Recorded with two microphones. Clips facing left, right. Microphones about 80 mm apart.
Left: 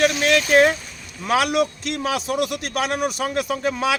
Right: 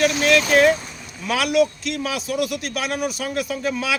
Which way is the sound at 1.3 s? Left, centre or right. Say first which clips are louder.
Even; left.